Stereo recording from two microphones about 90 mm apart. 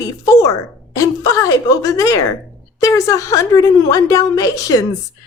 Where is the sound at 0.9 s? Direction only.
40° left (ahead or behind).